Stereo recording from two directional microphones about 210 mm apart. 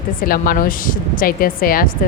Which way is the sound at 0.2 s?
40° left (ahead or behind).